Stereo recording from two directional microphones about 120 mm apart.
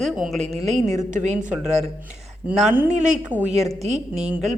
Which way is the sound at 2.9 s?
85° right.